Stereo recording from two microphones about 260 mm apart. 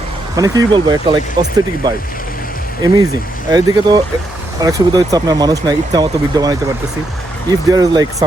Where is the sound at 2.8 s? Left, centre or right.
Centre.